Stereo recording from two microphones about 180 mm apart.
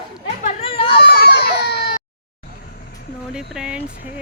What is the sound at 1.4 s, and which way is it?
Baby cry, 65° left (ahead or behind).